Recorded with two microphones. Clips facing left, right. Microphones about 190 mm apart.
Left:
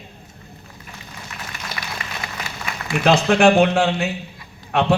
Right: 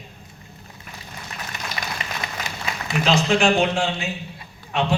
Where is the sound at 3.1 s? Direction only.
60° left (ahead or behind).